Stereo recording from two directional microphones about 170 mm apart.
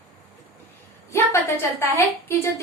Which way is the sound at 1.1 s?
15° left (ahead or behind).